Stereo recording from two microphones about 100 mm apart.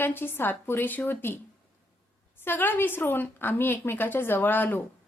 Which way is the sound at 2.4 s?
20° left (ahead or behind).